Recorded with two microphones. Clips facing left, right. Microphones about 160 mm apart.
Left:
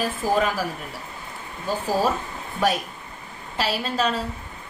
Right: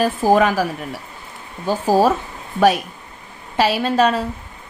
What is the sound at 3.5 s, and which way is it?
Speech, 65° right (ahead or behind).